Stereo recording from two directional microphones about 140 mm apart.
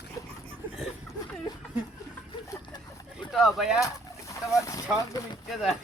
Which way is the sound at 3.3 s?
Centre (ahead or behind).